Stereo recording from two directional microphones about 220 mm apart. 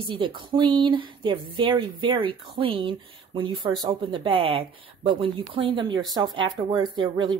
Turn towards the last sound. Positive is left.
turn(degrees=-20)  # may be behind; listen again after turning